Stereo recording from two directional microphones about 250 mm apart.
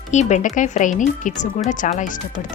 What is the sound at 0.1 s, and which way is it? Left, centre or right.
Speech, left.